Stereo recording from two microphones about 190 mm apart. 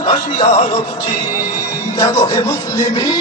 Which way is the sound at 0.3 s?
30° left (ahead or behind).